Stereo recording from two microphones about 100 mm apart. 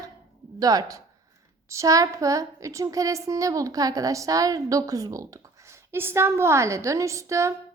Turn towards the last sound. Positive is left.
turn(degrees=-30)  # may be behind; listen again after turning